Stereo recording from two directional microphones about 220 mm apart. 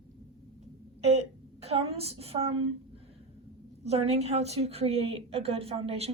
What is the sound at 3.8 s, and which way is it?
A woman's voice, 30° right (ahead or behind).